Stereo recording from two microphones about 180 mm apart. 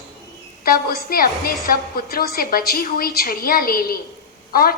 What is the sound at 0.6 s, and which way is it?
A woman's voice, 55° left (ahead or behind).